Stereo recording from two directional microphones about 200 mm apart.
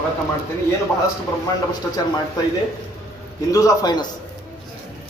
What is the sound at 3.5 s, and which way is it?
Speech, 15° left (ahead or behind).